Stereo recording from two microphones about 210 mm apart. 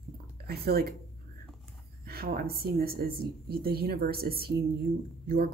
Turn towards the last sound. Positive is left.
turn(degrees=-45)  # may be behind; listen again after turning